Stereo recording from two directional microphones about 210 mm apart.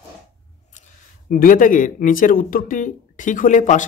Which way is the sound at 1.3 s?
40° left (ahead or behind).